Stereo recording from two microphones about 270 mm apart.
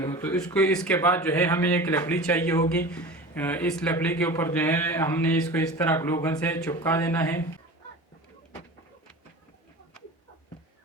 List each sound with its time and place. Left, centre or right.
0.0 s a man's voice: centre